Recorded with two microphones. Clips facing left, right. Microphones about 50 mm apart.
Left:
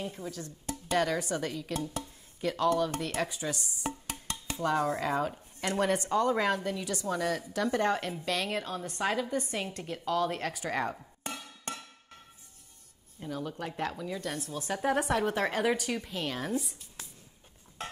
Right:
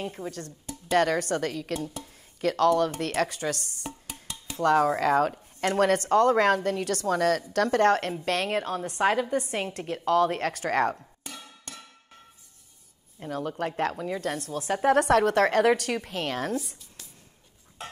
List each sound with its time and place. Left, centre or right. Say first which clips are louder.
0.0 s speech: right 4 dB; right
0.9 s a woman's voice: right 6 dB; right
3.8 s music: left 4 dB; left
4.6 s a woman's voice: right 7 dB; right
8.3 s a woman's voice: right 5 dB; right
9.8 s a woman's voice: right 8 dB; right
11.3 s a sound: left 4 dB; left
13.3 s a woman's voice: right 6 dB; right
14.0 s a woman's voice: right 6 dB; right
14.5 s a woman's voice: right 7 dB; right